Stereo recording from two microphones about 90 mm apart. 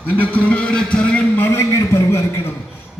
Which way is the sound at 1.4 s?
30° left (ahead or behind).